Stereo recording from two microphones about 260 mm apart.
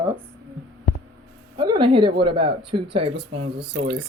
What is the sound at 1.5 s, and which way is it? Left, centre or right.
Speech, centre.